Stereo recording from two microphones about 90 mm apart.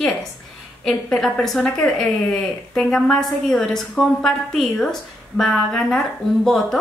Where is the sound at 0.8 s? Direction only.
5° left (ahead or behind).